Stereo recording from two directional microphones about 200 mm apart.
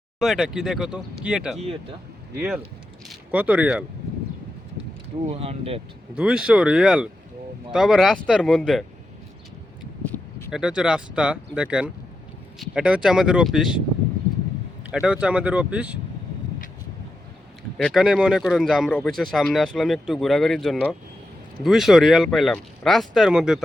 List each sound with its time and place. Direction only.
0.2 s speech: centre (ahead or behind)
1.5 s speech: 30° right (ahead or behind)
3.1 s speech: 10° right (ahead or behind)
5.2 s speech: 30° right (ahead or behind)
6.1 s speech: 5° right (ahead or behind)
10.0 s a sound: 10° left (ahead or behind)
10.5 s speech: 5° right (ahead or behind)
14.8 s speech: 5° right (ahead or behind)
17.6 s speech: centre (ahead or behind)